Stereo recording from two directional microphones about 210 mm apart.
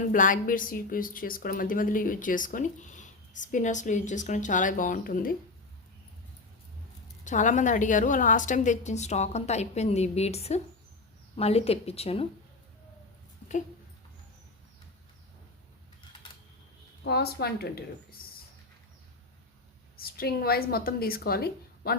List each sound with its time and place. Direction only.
0.1 s a woman's voice: 40° left (ahead or behind)
7.3 s a woman's voice: 35° left (ahead or behind)
13.4 s a sound: 30° left (ahead or behind)
17.0 s a woman's voice: 50° left (ahead or behind)
18.2 s a sound: 45° left (ahead or behind)
20.0 s a woman's voice: 45° left (ahead or behind)